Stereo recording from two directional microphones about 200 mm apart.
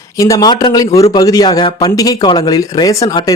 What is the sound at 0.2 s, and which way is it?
Speech, 15° left (ahead or behind).